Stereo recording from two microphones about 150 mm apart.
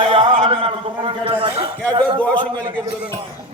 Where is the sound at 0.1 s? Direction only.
40° right (ahead or behind).